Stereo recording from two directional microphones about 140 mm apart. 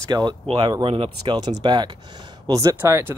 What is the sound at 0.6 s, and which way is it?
Speech, 35° right (ahead or behind).